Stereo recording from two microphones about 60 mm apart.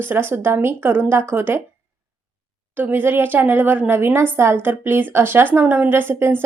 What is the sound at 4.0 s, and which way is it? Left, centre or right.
A woman's voice, right.